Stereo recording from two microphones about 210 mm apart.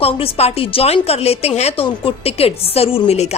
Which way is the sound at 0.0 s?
30° left (ahead or behind).